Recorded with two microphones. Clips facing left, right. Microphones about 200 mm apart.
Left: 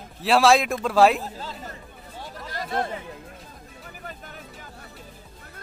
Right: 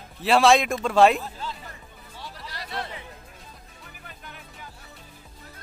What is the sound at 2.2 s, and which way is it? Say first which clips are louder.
Chatter: left 5 dB; 50° left (ahead or behind).